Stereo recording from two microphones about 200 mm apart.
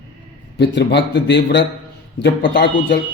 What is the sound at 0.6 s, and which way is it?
Speech, 60° left (ahead or behind).